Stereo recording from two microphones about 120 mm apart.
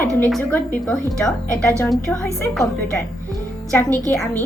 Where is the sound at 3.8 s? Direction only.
15° left (ahead or behind).